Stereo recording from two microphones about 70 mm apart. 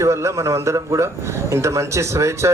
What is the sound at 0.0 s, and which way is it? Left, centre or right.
Speech, right.